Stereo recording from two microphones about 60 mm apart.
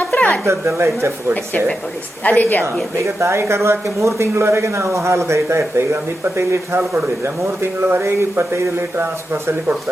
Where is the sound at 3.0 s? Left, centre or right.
Right.